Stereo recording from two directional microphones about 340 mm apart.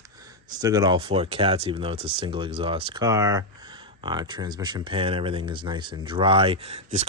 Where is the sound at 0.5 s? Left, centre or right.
Centre.